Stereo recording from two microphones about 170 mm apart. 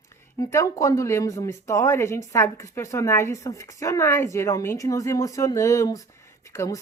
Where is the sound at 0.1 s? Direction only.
20° left (ahead or behind).